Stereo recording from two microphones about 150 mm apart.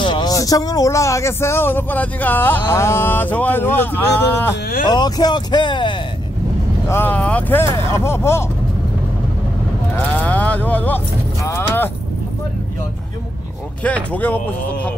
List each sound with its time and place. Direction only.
0.0 s speech: 30° left (ahead or behind)
4.8 s speech: 30° left (ahead or behind)
6.9 s speech: 15° left (ahead or behind)
9.9 s music: 10° left (ahead or behind)
11.4 s speech: 15° left (ahead or behind)
13.8 s speech: 10° left (ahead or behind)